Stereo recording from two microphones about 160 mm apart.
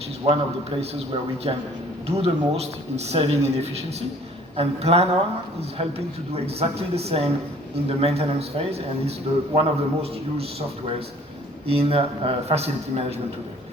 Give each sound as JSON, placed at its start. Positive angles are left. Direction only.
{"t": 0.2, "sound": "a man's voice", "side_deg": -30}
{"t": 6.3, "sound": "a man's voice", "side_deg": -40}
{"t": 11.7, "sound": "a man's voice", "side_deg": -35}